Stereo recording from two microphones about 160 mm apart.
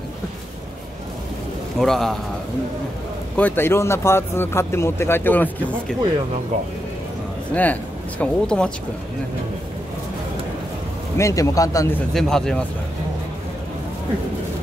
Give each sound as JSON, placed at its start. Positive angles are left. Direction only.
{"t": 1.8, "sound": "speech", "side_deg": 0}
{"t": 3.3, "sound": "speech", "side_deg": 10}
{"t": 7.5, "sound": "speech", "side_deg": 10}
{"t": 11.1, "sound": "a man's voice", "side_deg": 20}
{"t": 12.1, "sound": "speech", "side_deg": 0}